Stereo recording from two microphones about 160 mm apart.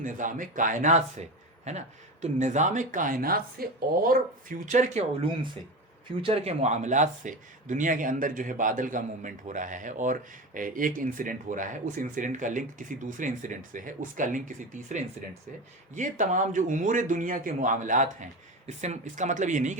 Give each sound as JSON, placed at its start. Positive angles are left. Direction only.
{"t": 0.0, "sound": "speech", "side_deg": -55}
{"t": 2.2, "sound": "speech", "side_deg": -50}
{"t": 6.2, "sound": "speech", "side_deg": -40}